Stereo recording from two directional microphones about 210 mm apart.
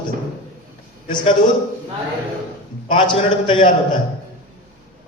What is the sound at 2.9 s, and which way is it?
Speech, 25° left (ahead or behind).